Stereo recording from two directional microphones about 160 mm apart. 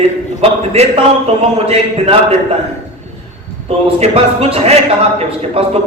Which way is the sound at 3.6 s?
40° right (ahead or behind).